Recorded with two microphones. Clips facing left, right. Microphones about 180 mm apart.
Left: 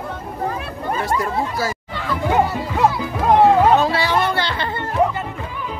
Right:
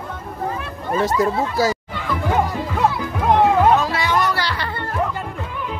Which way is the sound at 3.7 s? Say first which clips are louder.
Left 2 dB; 30° left (ahead or behind).